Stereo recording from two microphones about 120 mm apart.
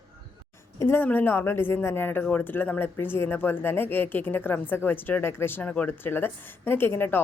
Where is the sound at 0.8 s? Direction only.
20° left (ahead or behind).